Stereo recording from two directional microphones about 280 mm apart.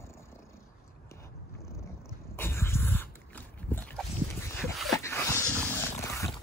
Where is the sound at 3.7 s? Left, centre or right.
Centre.